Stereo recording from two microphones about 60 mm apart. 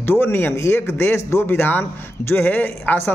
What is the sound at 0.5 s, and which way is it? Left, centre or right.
Speech, left.